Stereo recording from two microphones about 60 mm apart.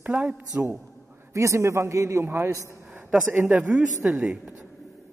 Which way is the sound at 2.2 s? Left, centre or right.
Right.